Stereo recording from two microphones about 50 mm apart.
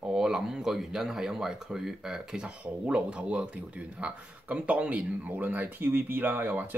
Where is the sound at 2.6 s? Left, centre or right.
Right.